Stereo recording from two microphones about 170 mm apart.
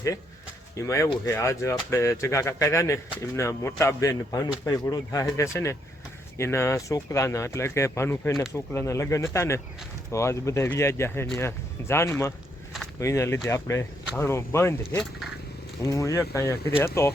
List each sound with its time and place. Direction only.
0.8 s speech: 15° left (ahead or behind)
15.8 s speech: 20° left (ahead or behind)